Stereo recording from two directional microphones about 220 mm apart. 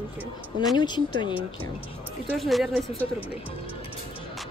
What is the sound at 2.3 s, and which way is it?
A woman's voice, centre (ahead or behind).